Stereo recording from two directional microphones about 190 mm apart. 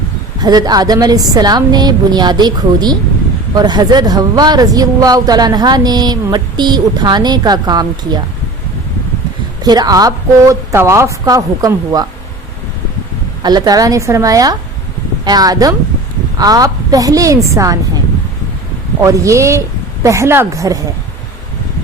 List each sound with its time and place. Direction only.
0.3 s speech: 20° right (ahead or behind)
9.6 s speech: 20° right (ahead or behind)
13.4 s speech: 20° right (ahead or behind)
19.0 s speech: 15° right (ahead or behind)